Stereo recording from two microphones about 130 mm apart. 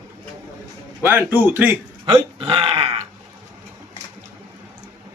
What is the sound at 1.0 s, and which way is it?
Speech, 15° right (ahead or behind).